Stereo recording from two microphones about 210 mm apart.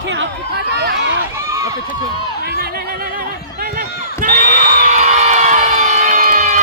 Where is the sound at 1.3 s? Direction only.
15° right (ahead or behind).